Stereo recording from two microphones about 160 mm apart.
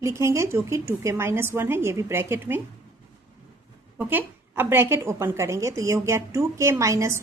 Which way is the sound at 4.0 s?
10° right (ahead or behind).